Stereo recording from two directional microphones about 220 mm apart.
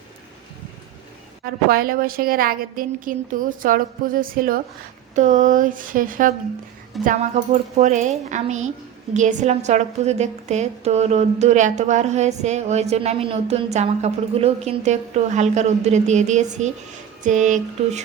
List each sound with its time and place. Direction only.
1.7 s a woman's voice: 40° right (ahead or behind)